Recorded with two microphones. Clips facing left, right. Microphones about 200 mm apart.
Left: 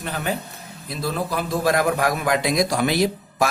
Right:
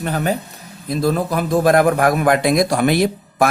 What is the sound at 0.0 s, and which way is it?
A man's voice, 45° right (ahead or behind).